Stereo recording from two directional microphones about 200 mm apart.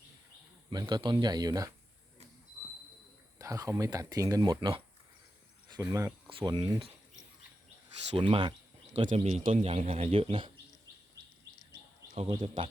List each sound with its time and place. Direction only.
0.7 s a man's voice: 20° right (ahead or behind)
3.3 s speech: 15° right (ahead or behind)
8.1 s a man's voice: 25° right (ahead or behind)
12.1 s speech: 30° right (ahead or behind)